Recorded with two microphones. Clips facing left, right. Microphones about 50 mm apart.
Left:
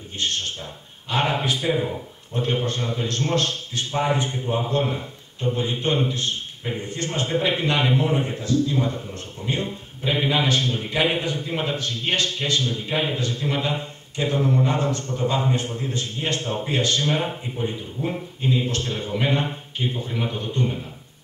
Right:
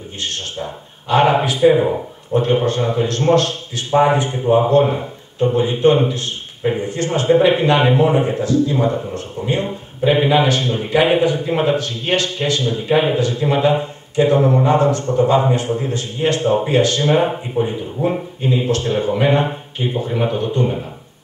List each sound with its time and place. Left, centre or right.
0.2 s a man's voice: right
4.6 s a man's voice: right
4.9 s a sound: right
5.5 s a man's voice: right